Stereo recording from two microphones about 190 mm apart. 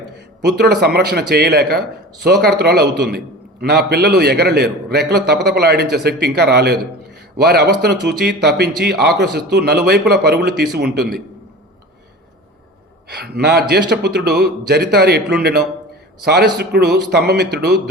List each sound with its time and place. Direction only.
0.4 s speech: 55° right (ahead or behind)
13.1 s speech: 60° right (ahead or behind)